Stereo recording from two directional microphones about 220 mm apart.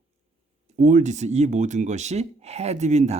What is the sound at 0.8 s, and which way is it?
Speech, 35° right (ahead or behind).